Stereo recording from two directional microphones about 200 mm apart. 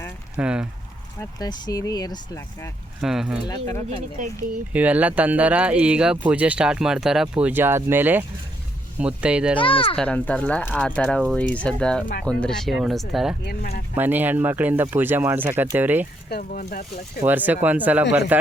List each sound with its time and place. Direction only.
0.3 s speech: 5° right (ahead or behind)
1.2 s speech: 20° left (ahead or behind)
3.0 s speech: centre (ahead or behind)
3.4 s speech: 15° left (ahead or behind)
4.7 s speech: 5° right (ahead or behind)
9.6 s speech: 25° left (ahead or behind)
9.9 s speech: 5° left (ahead or behind)
13.4 s speech: 50° left (ahead or behind)
13.9 s speech: 10° right (ahead or behind)
16.4 s speech: 45° left (ahead or behind)
17.2 s speech: 10° right (ahead or behind)